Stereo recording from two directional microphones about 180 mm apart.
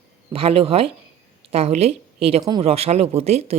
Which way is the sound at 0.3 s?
30° right (ahead or behind).